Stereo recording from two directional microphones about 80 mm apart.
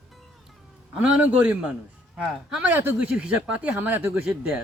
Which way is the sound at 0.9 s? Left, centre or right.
Centre.